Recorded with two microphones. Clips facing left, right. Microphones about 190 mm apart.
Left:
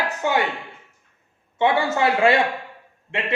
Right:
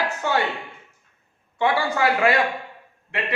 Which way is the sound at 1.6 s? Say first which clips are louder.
Left 2 dB; 20° left (ahead or behind).